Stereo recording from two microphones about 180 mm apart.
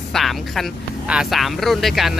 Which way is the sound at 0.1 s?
Centre (ahead or behind).